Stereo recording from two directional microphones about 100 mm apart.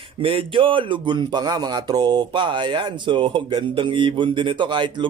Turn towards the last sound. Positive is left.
turn(degrees=-55)  # may be behind; listen again after turning